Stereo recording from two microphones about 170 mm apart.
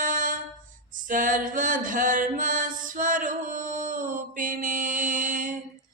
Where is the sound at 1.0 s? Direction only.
50° right (ahead or behind).